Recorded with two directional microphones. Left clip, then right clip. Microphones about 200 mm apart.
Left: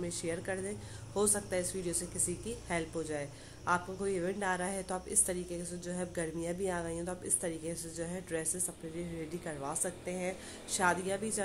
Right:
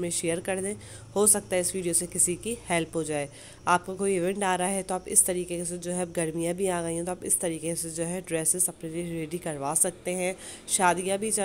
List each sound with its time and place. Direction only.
0.0 s a woman's voice: 40° right (ahead or behind)